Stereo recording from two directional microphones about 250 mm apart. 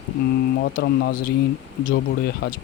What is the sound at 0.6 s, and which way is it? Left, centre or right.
Speech, left.